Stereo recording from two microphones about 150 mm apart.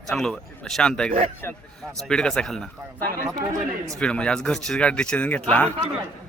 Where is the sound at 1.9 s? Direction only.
5° left (ahead or behind).